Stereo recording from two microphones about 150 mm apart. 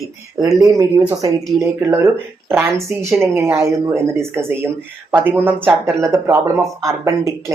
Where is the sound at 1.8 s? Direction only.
15° right (ahead or behind).